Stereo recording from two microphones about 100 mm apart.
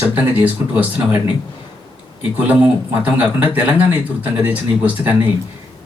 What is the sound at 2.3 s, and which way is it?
A man's voice, 15° right (ahead or behind).